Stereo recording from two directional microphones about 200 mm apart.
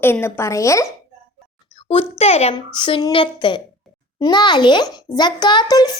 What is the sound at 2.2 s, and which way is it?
A child's voice, 30° left (ahead or behind).